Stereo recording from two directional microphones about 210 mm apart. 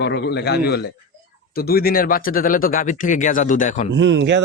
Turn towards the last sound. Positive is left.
turn(degrees=-60)  # may be behind; listen again after turning